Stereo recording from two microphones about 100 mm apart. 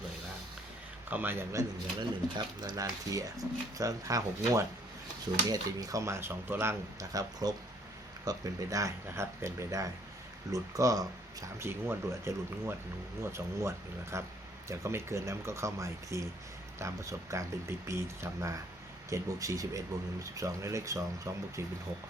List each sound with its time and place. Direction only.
1.1 s speech: 20° right (ahead or behind)
2.0 s speech: 45° right (ahead or behind); by 6.7 s 25° right (ahead or behind)
7.1 s speech: 40° right (ahead or behind)
11.6 s speech: 25° right (ahead or behind)